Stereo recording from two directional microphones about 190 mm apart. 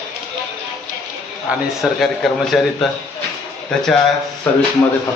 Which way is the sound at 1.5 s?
5° right (ahead or behind).